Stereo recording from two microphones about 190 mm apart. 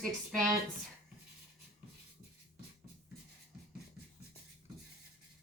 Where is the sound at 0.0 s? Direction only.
Centre (ahead or behind).